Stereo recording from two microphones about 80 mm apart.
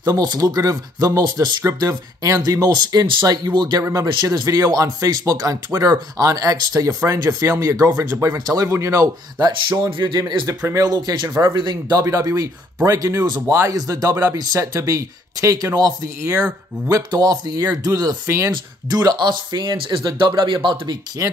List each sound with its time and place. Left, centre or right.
0.0 s speech: right
8.6 s speech: right
9.4 s speech: right
10.8 s speech: right
11.5 s speech: right
12.0 s speech: right
16.3 s speech: centre
17.1 s speech: right
18.9 s speech: right
19.1 s speech: right
20.1 s speech: right
20.6 s speech: right
21.2 s speech: right